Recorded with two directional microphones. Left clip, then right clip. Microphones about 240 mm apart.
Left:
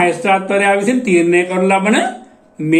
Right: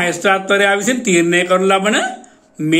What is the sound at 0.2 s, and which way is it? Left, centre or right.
Speech, right.